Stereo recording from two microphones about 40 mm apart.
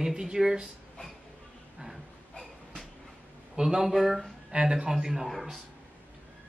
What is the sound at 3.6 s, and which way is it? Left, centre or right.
Speech, centre.